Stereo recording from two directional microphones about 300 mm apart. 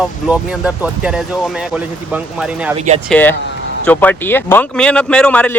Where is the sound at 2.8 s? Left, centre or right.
Centre.